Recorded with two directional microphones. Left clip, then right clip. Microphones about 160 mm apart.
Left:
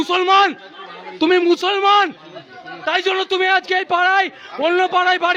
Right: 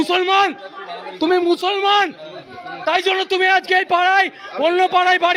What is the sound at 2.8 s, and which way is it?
A man's voice, 30° left (ahead or behind).